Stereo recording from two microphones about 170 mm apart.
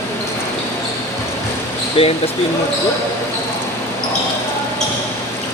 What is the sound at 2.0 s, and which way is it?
Speech, 30° left (ahead or behind).